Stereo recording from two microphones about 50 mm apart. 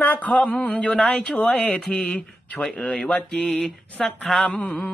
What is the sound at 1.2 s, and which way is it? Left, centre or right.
Music, left.